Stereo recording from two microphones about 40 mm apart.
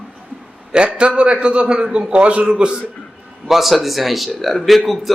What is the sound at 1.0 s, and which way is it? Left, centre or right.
A man's voice, right.